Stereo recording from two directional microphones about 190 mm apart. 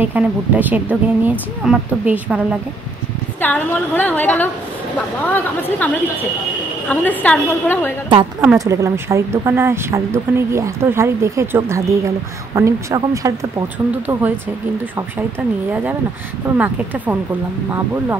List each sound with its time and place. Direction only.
0.0 s a woman's voice: 10° right (ahead or behind)
3.3 s a woman's voice: 10° left (ahead or behind)
6.9 s a woman's voice: 10° left (ahead or behind)
8.4 s a woman's voice: 15° right (ahead or behind)
15.7 s a woman's voice: 10° right (ahead or behind)